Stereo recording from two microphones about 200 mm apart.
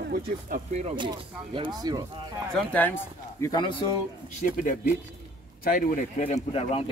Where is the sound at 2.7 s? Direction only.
10° left (ahead or behind).